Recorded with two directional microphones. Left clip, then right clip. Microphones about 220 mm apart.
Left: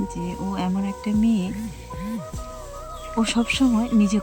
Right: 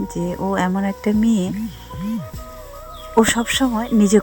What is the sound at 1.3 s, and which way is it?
Speech, 15° right (ahead or behind).